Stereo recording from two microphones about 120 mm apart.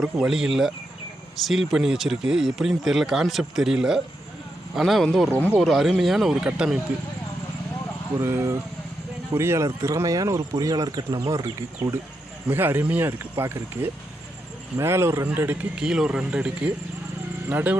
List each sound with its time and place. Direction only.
0.0 s speech: 5° right (ahead or behind)
5.3 s speech: 20° right (ahead or behind)
5.5 s speech: centre (ahead or behind)
8.2 s speech: 25° right (ahead or behind)
12.5 s speech: 15° right (ahead or behind)
15.3 s speech: 10° right (ahead or behind)